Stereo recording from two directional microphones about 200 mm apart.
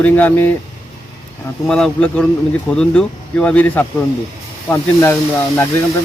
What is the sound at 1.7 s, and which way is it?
Speech, 5° left (ahead or behind).